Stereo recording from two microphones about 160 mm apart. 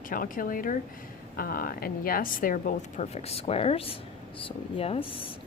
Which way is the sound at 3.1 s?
40° left (ahead or behind).